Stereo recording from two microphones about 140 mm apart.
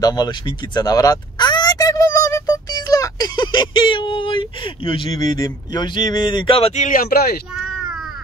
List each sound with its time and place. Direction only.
0.0 s speech: 30° left (ahead or behind)
6.7 s speech: 70° left (ahead or behind); by 7.3 s 90° left
7.5 s a sound: 5° right (ahead or behind)